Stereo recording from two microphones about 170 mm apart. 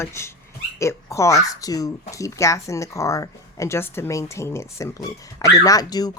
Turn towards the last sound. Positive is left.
turn(degrees=20)  # may be behind; listen again after turning